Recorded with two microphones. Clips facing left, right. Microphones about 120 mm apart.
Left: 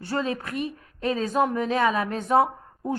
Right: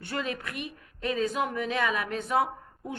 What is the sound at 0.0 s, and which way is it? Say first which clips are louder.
A woman's voice: left 5 dB; 30° left (ahead or behind).